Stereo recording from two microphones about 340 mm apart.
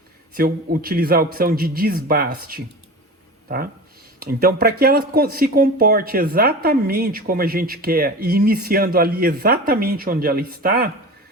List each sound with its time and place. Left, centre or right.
0.3 s speech: right
4.2 s speech: right